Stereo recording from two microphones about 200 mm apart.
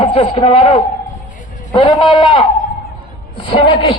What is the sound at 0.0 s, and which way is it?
Speech, 25° left (ahead or behind).